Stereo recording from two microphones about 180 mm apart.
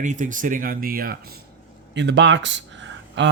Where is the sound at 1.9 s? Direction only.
75° right (ahead or behind).